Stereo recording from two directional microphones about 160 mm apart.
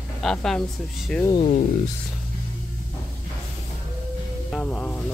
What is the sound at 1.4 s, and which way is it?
Speech, 60° left (ahead or behind).